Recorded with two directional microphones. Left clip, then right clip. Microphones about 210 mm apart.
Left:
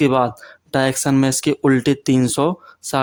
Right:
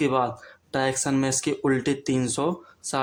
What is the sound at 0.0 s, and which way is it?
Speech, 40° left (ahead or behind).